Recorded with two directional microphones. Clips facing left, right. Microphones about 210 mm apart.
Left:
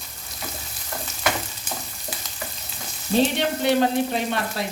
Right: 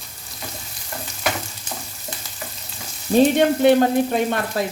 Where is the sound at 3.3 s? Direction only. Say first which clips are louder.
Right 7 dB; 50° right (ahead or behind).